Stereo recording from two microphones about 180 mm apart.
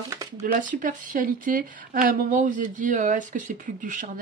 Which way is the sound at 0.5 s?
45° right (ahead or behind).